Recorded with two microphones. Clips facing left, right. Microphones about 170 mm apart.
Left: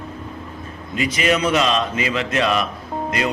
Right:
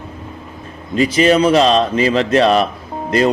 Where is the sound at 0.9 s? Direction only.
35° right (ahead or behind).